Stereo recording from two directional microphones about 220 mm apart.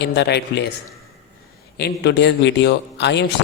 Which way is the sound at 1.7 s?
50° left (ahead or behind).